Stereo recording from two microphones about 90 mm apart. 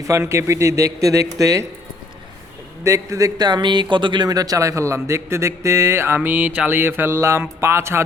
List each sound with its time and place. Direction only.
0.0 s speech: 35° right (ahead or behind)
2.8 s speech: 35° right (ahead or behind)